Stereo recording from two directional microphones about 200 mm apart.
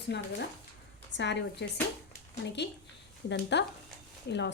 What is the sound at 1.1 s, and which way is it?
A woman's voice, 60° left (ahead or behind).